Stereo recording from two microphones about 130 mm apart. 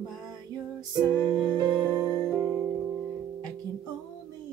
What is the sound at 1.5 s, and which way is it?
Music, 35° right (ahead or behind).